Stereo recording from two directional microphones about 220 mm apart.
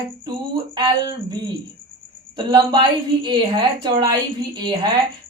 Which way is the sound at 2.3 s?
20° right (ahead or behind).